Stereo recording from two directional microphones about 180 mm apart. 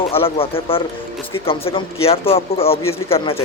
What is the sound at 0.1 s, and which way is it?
Speech, 30° left (ahead or behind).